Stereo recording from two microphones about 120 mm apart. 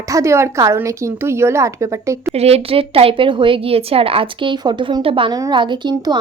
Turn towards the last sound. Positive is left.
turn(degrees=-35)  # may be behind; listen again after turning